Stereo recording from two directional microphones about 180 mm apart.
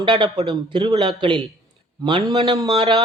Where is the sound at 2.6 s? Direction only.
30° right (ahead or behind).